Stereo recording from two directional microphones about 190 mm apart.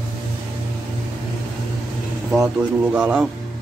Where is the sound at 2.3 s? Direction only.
5° right (ahead or behind).